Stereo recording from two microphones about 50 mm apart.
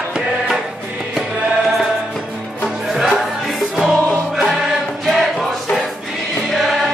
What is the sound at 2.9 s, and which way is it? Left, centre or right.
Music, centre.